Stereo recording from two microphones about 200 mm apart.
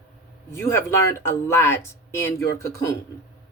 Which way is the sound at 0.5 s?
15° left (ahead or behind).